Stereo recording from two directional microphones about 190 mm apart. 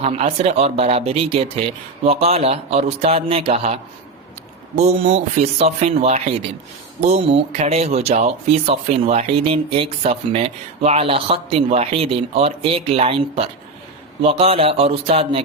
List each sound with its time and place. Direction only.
0.0 s speech: 35° right (ahead or behind)